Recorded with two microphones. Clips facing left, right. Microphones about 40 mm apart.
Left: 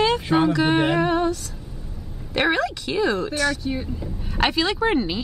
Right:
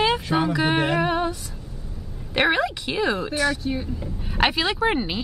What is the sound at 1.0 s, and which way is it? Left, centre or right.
Speech, centre.